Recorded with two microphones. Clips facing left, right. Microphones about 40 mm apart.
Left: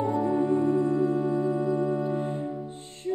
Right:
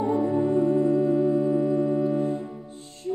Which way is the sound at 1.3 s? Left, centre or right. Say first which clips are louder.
Right 3 dB; centre.